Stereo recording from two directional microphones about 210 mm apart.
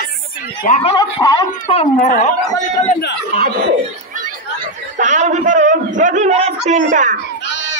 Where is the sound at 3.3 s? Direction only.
45° right (ahead or behind).